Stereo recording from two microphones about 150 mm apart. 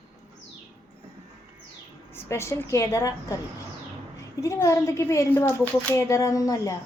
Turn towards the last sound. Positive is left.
turn(degrees=20)  # may be behind; listen again after turning